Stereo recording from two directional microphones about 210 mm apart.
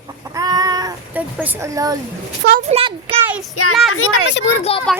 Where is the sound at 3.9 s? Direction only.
90° left; by 4.5 s 75° left (ahead or behind).